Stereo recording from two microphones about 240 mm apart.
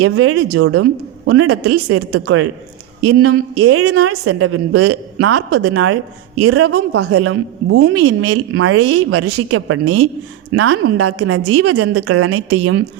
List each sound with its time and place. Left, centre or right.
0.0 s a woman's voice: right